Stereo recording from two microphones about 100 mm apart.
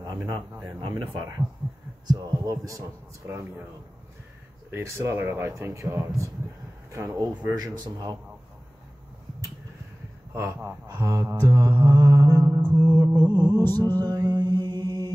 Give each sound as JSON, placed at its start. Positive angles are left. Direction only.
{"t": 0.0, "sound": "speech", "side_deg": -45}
{"t": 4.6, "sound": "speech", "side_deg": -25}
{"t": 10.3, "sound": "speech", "side_deg": -25}
{"t": 11.0, "sound": "mantra", "side_deg": -30}
{"t": 12.7, "sound": "music", "side_deg": -50}
{"t": 14.0, "sound": "mantra", "side_deg": -45}